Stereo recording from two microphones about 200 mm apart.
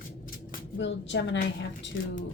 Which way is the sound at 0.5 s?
60° left (ahead or behind).